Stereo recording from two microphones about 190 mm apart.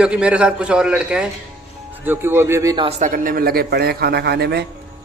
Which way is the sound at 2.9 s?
45° right (ahead or behind).